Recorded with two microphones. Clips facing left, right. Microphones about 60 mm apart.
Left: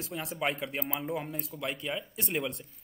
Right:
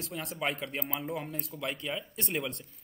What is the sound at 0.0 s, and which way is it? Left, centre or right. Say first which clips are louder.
Speech: left 1 dB; centre.